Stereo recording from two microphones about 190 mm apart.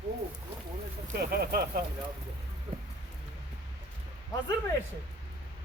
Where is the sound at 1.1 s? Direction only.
50° right (ahead or behind).